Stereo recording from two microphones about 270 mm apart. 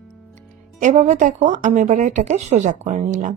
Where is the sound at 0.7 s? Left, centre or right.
Right.